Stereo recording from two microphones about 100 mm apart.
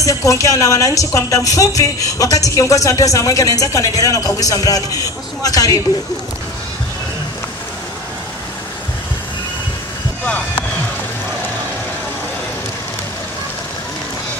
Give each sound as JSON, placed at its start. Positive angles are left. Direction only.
{"t": 0.0, "sound": "speech", "side_deg": 35}